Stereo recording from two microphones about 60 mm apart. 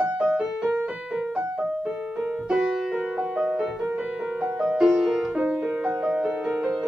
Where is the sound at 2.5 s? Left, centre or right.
Centre.